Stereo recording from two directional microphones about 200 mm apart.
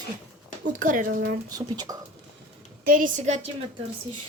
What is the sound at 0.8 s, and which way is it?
Speech, 45° right (ahead or behind).